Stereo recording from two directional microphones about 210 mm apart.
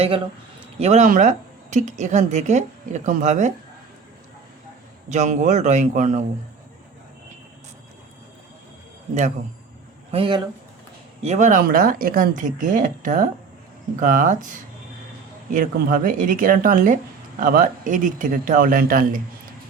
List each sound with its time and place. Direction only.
0.8 s a woman's voice: 35° right (ahead or behind)
5.0 s a woman's voice: 35° right (ahead or behind)
10.1 s a woman's voice: 25° right (ahead or behind); by 19.2 s 45° right (ahead or behind)